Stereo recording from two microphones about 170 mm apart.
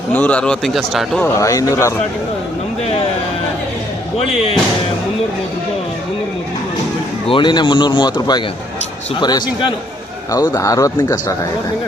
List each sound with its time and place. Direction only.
0.1 s speech: 10° left (ahead or behind)
1.2 s speech: 20° left (ahead or behind)
7.3 s a man's voice: 30° left (ahead or behind)